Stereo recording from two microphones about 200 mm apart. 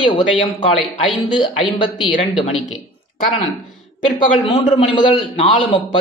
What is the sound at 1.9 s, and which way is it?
Speech, 20° left (ahead or behind).